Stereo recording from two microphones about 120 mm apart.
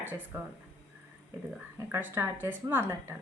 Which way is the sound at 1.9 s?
20° right (ahead or behind).